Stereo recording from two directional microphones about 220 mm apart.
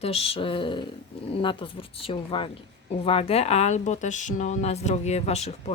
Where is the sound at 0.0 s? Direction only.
25° left (ahead or behind).